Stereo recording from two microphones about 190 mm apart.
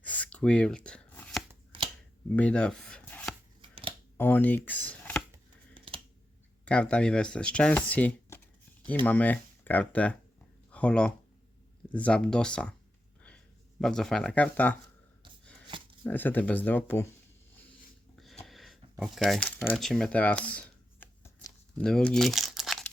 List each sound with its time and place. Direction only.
0.0 s a sound: 5° left (ahead or behind)
1.7 s shuffling cards: 25° right (ahead or behind)
2.3 s chopping: 5° left (ahead or behind)
3.6 s a sound: 25° right (ahead or behind)
4.2 s speech: 10° left (ahead or behind)
5.7 s typing: 25° right (ahead or behind)
6.7 s speech: 5° left (ahead or behind)
16.0 s speech: 10° left (ahead or behind)
18.4 s shuffling cards: centre (ahead or behind)
21.8 s crumpling: 5° left (ahead or behind)